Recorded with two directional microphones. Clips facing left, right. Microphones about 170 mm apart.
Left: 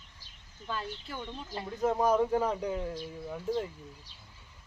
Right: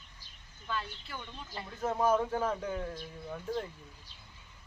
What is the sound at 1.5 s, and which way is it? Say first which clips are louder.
Speech: left 5 dB; 20° left (ahead or behind).